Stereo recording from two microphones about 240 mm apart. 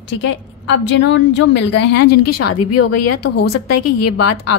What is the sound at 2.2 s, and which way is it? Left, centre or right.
A woman's voice, left.